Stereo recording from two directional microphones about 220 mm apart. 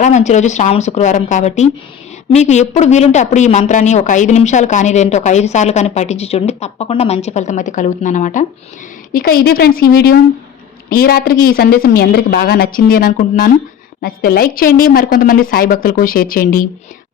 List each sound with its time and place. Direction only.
0.0 s a woman's voice: 30° left (ahead or behind)